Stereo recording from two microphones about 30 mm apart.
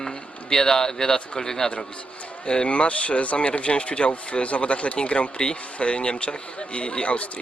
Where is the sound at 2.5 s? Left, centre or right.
Left.